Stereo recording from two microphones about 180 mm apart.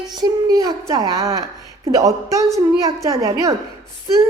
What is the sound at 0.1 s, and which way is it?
A woman's voice, 20° right (ahead or behind).